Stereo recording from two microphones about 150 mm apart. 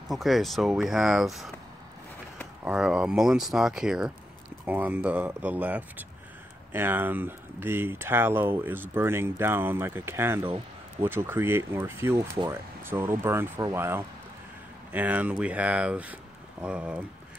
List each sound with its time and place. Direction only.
0.1 s speech: centre (ahead or behind)
2.6 s speech: 5° right (ahead or behind)